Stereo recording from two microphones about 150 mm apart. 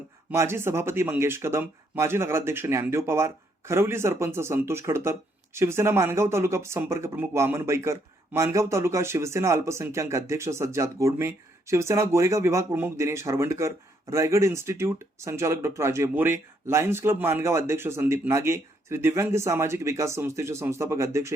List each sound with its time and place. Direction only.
0.3 s speech: 15° right (ahead or behind)